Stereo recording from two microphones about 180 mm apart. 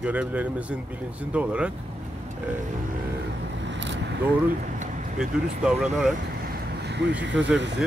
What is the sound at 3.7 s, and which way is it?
Vehicle, 85° right.